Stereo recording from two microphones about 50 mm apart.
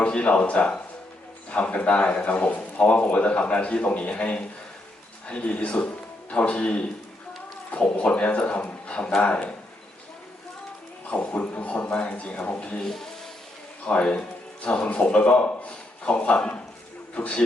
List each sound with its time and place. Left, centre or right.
0.0 s a man's voice: left
11.0 s a man's voice: left
12.8 s speech: centre
13.8 s a man's voice: left